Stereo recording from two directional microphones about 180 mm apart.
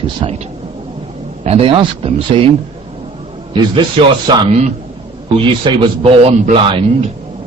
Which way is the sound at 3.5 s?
25° right (ahead or behind).